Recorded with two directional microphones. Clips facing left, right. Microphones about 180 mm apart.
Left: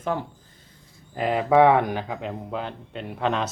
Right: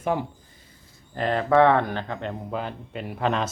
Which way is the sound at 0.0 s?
15° right (ahead or behind).